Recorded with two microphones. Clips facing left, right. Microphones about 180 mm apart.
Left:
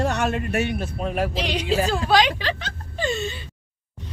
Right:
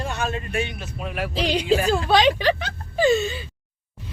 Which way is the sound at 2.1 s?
25° right (ahead or behind).